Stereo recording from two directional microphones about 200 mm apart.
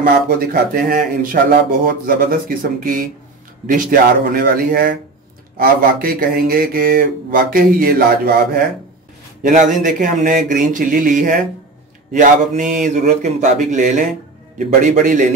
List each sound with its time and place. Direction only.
0.0 s speech: 45° right (ahead or behind)